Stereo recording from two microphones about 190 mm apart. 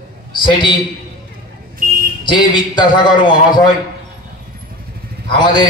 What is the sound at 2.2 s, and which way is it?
A man's voice, 25° left (ahead or behind).